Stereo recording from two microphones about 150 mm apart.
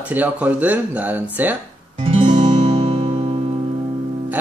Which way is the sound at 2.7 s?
35° right (ahead or behind).